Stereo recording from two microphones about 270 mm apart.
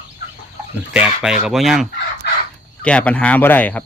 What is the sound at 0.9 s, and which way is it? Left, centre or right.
Speech, centre.